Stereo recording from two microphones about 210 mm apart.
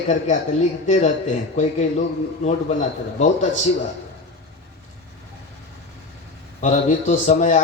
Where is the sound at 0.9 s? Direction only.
35° left (ahead or behind).